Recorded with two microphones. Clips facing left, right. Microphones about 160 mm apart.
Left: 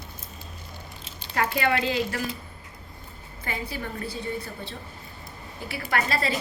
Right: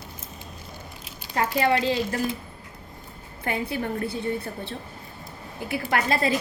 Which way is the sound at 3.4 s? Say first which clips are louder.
Right 6 dB; 60° right (ahead or behind).